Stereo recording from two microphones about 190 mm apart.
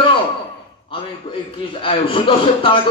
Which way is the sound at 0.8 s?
25° left (ahead or behind).